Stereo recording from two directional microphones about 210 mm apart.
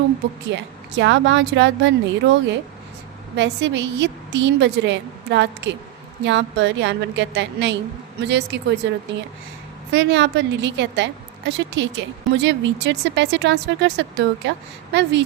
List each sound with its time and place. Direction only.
0.5 s a woman's voice: 60° right (ahead or behind)